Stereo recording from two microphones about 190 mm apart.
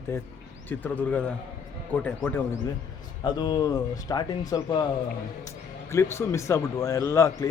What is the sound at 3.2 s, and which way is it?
Speech, 20° left (ahead or behind).